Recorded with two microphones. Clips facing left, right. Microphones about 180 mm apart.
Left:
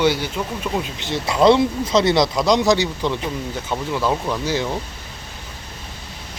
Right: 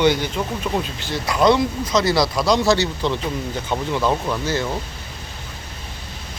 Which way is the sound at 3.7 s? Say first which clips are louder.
Right 1 dB; centre (ahead or behind).